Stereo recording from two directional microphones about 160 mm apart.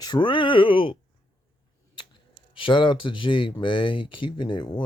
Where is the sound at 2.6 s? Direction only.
30° left (ahead or behind).